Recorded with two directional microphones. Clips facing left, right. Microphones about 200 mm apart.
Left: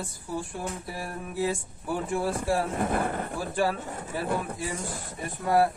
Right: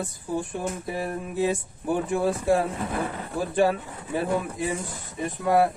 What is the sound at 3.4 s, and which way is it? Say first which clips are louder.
Speech: right 7 dB; 20° right (ahead or behind).